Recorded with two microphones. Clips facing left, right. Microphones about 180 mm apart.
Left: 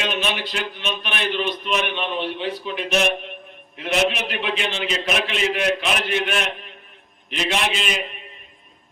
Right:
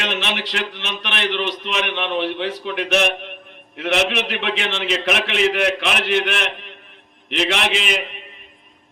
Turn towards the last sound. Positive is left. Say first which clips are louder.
# right 2 dB
turn(degrees=-70)  # may be behind; listen again after turning